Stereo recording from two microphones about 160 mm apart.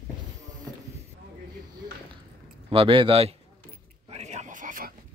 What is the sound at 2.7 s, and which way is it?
Speech, 35° right (ahead or behind).